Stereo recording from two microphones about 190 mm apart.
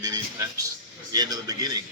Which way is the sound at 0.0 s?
20° right (ahead or behind).